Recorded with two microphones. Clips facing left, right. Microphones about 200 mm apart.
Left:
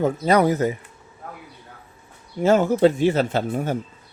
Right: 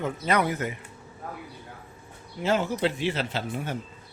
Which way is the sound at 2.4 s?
45° left (ahead or behind).